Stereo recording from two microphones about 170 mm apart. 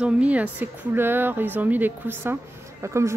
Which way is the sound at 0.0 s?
5° right (ahead or behind).